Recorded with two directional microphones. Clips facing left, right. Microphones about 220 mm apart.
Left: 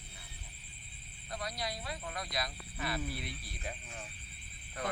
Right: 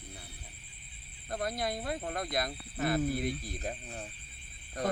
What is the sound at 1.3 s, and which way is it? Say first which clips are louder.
Speech: right 6 dB; 50° right (ahead or behind).